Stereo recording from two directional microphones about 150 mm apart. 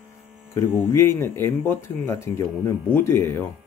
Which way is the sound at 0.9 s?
15° left (ahead or behind).